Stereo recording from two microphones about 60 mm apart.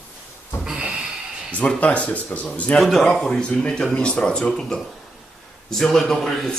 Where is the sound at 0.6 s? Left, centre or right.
Centre.